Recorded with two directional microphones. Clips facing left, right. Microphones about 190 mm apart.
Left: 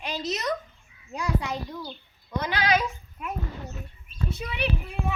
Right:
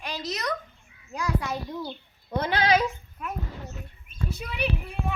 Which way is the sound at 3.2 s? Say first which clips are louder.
Left 1 dB; 20° left (ahead or behind).